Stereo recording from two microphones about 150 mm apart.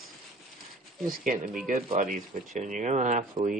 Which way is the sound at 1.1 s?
65° right (ahead or behind).